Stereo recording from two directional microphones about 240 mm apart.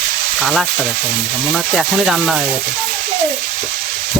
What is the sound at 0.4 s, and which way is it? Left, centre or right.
Speech, centre.